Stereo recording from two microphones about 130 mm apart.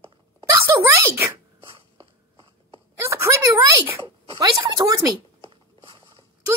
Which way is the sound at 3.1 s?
25° right (ahead or behind).